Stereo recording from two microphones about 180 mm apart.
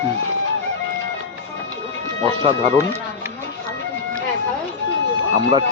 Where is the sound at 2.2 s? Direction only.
35° right (ahead or behind).